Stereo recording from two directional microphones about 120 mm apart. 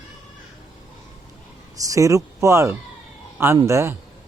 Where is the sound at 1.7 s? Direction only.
30° right (ahead or behind).